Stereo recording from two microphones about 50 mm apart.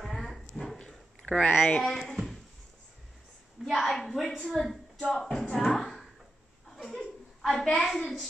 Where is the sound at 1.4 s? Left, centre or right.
Left.